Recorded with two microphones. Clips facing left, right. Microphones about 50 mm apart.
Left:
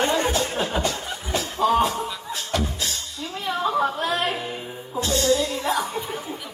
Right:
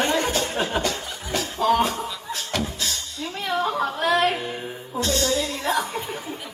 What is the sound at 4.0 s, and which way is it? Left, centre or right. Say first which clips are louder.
Music: right 4 dB; right.